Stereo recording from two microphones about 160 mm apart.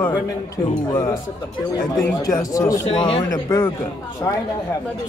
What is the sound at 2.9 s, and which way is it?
Speech, 30° left (ahead or behind).